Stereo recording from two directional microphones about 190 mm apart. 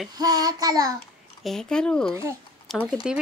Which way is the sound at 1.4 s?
Centre (ahead or behind).